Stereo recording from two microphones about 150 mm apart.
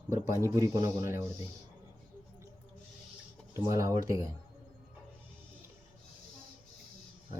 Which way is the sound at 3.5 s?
20° right (ahead or behind).